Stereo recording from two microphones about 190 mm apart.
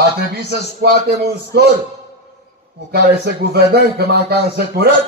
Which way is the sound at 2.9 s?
55° right (ahead or behind).